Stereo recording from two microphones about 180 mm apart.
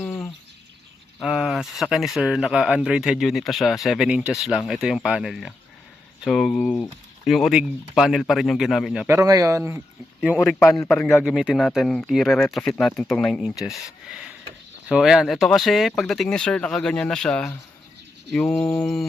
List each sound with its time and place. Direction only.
0.0 s bird: 10° left (ahead or behind)
1.2 s speech: centre (ahead or behind)
9.0 s speech: 20° right (ahead or behind)
10.3 s speech: 5° left (ahead or behind)
10.7 s a man's voice: 15° left (ahead or behind)
10.9 s speech: 5° left (ahead or behind)
14.1 s filing: 5° right (ahead or behind)
14.8 s speech: 5° right (ahead or behind)